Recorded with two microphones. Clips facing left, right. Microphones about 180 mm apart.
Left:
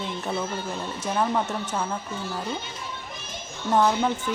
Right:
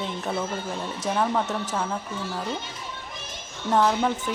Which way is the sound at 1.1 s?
Centre (ahead or behind).